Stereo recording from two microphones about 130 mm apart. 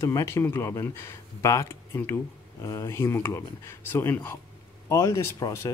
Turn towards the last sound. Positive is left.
turn(degrees=20)  # may be behind; listen again after turning